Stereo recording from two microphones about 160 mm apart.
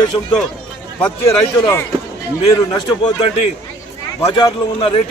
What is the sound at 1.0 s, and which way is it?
Speech, 15° left (ahead or behind).